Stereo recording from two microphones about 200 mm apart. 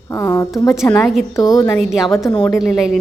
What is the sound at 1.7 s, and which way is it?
A woman's voice, centre (ahead or behind).